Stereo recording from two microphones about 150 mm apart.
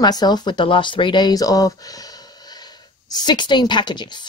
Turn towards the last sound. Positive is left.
turn(degrees=30)  # may be behind; listen again after turning